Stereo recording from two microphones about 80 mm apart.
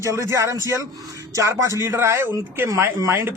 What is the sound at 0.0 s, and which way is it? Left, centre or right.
Speech, right.